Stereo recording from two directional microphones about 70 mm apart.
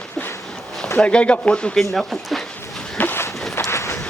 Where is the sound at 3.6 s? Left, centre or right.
Left.